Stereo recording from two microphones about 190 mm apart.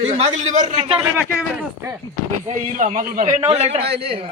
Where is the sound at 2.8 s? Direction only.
45° right (ahead or behind).